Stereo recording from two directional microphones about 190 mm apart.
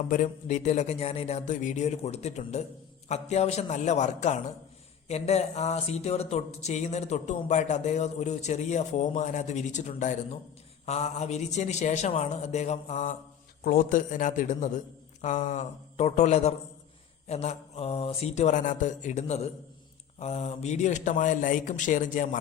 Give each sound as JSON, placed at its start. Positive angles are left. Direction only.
{"t": 0.1, "sound": "a man's voice", "side_deg": 40}